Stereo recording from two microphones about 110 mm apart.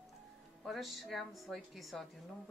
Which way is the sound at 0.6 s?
Centre (ahead or behind).